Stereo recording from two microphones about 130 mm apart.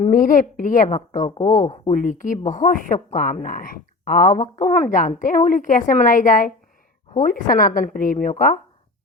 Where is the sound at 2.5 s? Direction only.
75° left (ahead or behind).